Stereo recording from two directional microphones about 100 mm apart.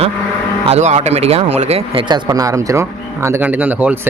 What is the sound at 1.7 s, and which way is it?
Speech, 80° right.